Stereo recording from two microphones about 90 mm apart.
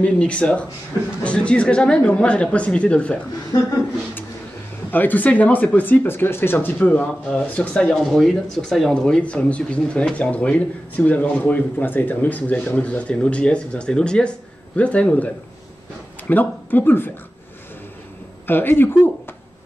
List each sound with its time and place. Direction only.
0.0 s speech: 15° left (ahead or behind)
4.9 s speech: 20° left (ahead or behind)
18.5 s speech: 25° left (ahead or behind)